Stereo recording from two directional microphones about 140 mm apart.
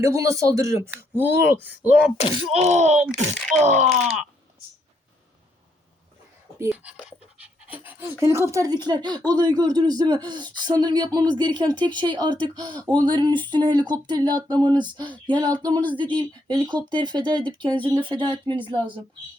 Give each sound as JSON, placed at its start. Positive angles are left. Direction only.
{"t": 0.0, "sound": "speech", "side_deg": -20}
{"t": 2.3, "sound": "speech", "side_deg": -40}
{"t": 2.6, "sound": "speech", "side_deg": -55}
{"t": 3.1, "sound": "speech", "side_deg": 0}
{"t": 3.6, "sound": "speech", "side_deg": -50}
{"t": 6.6, "sound": "speech", "side_deg": -10}
{"t": 8.2, "sound": "speech", "side_deg": -20}